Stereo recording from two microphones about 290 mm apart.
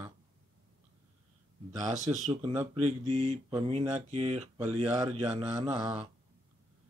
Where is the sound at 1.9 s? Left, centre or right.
Right.